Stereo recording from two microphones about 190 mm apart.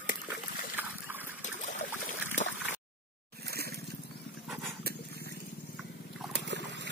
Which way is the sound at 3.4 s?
55° right (ahead or behind).